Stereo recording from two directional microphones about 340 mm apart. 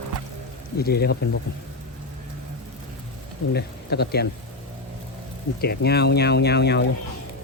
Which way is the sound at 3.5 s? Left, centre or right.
Left.